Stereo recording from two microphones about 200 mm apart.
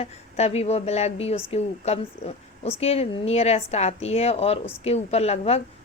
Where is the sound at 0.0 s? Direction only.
30° left (ahead or behind).